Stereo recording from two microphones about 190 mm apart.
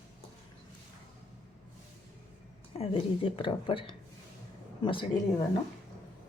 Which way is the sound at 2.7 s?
30° left (ahead or behind).